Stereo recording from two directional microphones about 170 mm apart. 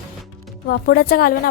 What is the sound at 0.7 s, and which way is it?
Speech, 70° left (ahead or behind).